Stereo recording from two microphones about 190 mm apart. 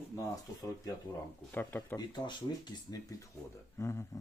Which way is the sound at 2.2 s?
20° left (ahead or behind).